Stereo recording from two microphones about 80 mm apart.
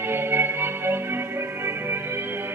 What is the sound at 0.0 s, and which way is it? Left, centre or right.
Music, right.